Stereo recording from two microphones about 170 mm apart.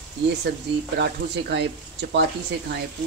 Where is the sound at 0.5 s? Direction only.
85° right.